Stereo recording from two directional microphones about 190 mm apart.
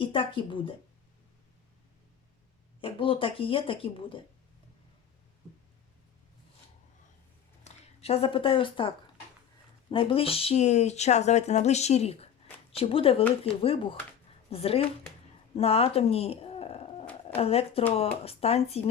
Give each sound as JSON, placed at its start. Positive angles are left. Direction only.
{"t": 0.0, "sound": "speech", "side_deg": 25}
{"t": 2.8, "sound": "speech", "side_deg": 30}
{"t": 7.6, "sound": "speech", "side_deg": 30}
{"t": 9.9, "sound": "speech", "side_deg": 30}
{"t": 15.5, "sound": "a sound", "side_deg": 30}
{"t": 17.2, "sound": "a woman's voice", "side_deg": 30}